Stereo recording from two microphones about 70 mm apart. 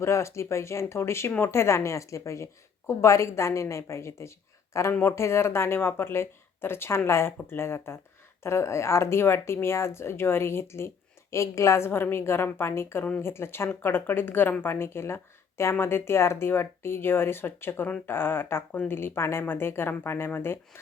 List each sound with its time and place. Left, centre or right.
0.0 s a woman's voice: left